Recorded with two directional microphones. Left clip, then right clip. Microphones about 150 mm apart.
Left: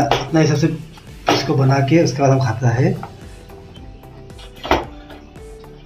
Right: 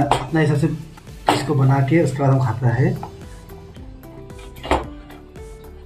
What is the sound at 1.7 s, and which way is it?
Speech, 30° left (ahead or behind).